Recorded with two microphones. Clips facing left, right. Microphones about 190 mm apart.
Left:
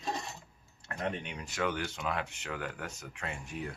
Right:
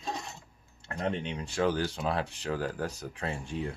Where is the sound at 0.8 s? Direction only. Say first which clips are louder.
Right 4 dB; 30° right (ahead or behind).